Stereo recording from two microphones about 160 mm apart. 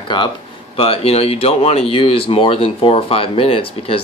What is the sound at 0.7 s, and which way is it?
Speech, 35° left (ahead or behind).